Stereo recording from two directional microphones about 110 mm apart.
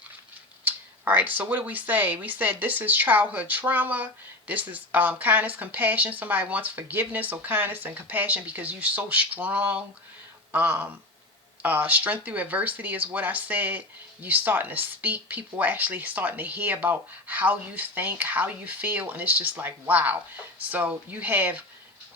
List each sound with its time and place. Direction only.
0.6 s speech: 15° right (ahead or behind)